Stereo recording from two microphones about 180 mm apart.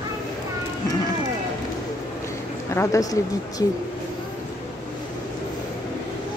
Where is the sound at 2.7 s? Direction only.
15° left (ahead or behind).